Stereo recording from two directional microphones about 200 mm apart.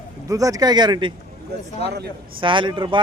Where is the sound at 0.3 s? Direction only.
15° right (ahead or behind).